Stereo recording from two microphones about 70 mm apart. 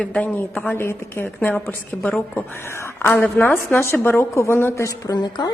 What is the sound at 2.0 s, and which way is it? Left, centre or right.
A woman's voice, centre.